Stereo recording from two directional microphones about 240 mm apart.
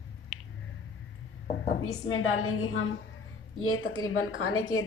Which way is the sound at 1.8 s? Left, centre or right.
Left.